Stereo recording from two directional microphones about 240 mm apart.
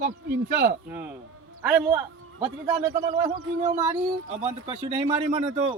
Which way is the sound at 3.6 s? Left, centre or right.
Right.